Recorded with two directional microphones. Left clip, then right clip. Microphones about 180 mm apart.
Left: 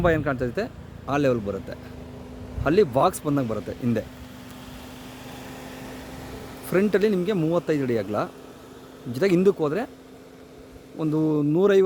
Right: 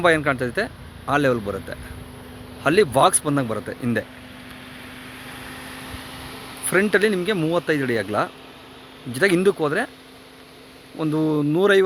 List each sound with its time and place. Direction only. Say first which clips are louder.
0.0 s speech: right 4 dB; 10° right (ahead or behind)
2.6 s speech: right 3 dB; 5° right (ahead or behind)
5.2 s vehicle: right 3 dB; 35° left (ahead or behind)
6.9 s speech: right 3 dB; centre (ahead or behind)
10.9 s speech: right 2 dB; 5° right (ahead or behind)